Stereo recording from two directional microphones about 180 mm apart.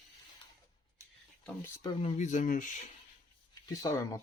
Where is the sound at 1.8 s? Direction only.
30° left (ahead or behind).